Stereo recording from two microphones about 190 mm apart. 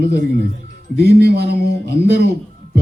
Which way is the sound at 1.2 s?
55° right (ahead or behind).